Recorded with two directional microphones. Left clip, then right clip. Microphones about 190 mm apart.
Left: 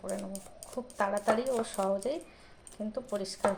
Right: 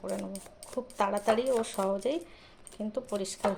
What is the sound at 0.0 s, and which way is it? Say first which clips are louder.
A woman's voice: right 2 dB; 15° right (ahead or behind).